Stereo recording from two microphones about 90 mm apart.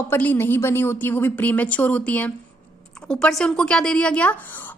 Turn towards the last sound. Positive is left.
turn(degrees=15)  # may be behind; listen again after turning